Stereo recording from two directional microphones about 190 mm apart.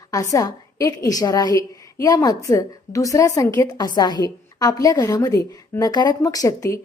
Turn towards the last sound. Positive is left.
turn(degrees=20)  # may be behind; listen again after turning